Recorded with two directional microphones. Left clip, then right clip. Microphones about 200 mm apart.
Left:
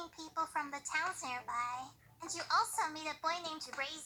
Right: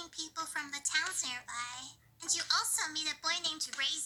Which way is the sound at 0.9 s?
25° right (ahead or behind).